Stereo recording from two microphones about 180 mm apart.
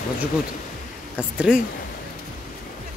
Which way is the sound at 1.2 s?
5° right (ahead or behind).